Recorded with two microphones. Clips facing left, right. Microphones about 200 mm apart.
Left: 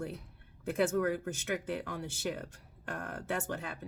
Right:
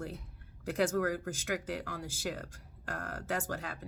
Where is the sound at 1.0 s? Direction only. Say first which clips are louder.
Left 1 dB; 20° left (ahead or behind).